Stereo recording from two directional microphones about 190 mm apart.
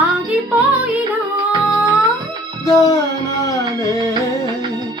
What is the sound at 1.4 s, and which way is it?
Humming, 10° right (ahead or behind).